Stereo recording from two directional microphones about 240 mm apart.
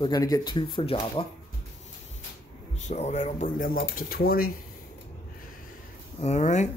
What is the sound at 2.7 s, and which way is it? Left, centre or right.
Speech, left.